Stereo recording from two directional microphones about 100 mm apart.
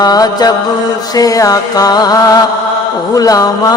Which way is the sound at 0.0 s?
45° left (ahead or behind).